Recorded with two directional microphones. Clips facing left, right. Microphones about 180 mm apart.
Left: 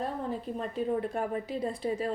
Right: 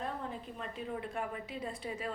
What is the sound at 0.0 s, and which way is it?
A woman's voice, 35° left (ahead or behind).